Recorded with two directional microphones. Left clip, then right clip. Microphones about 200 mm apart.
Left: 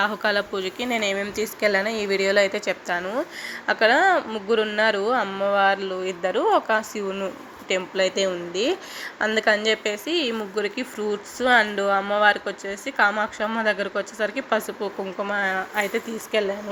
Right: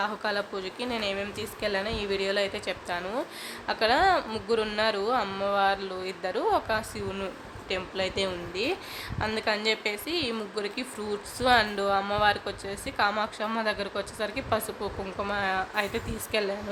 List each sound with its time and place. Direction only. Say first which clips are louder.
0.0 s a woman's voice: left 7 dB; 15° left (ahead or behind)